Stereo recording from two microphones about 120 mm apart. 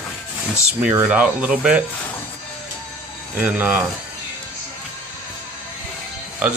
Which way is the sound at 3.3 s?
15° right (ahead or behind).